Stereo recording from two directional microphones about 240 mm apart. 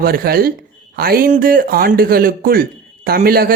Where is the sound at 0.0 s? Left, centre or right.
Right.